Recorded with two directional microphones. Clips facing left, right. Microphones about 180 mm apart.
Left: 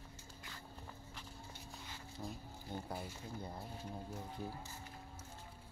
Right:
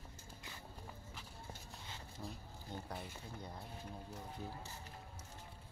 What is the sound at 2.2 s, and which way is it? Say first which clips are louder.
Speech: left 2 dB; 15° left (ahead or behind).